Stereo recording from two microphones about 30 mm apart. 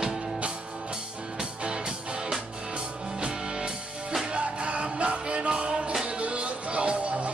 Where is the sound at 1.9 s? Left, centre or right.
Right.